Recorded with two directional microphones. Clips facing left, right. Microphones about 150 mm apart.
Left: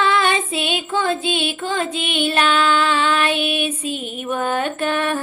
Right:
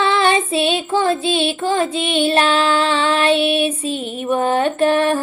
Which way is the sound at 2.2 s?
25° right (ahead or behind).